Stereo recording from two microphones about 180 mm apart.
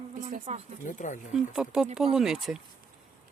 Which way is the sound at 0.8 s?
45° left (ahead or behind).